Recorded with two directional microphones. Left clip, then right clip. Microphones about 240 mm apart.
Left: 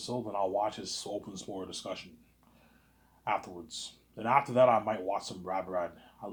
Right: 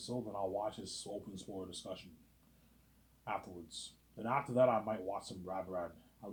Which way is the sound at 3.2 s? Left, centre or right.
Left.